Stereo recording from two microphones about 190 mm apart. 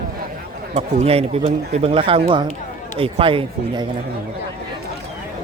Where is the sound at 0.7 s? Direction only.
35° right (ahead or behind).